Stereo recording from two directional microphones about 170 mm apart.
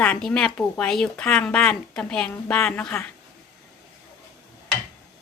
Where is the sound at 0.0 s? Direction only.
5° left (ahead or behind).